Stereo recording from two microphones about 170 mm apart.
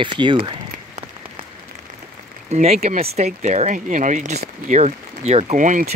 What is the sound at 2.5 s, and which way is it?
Speech, 40° right (ahead or behind).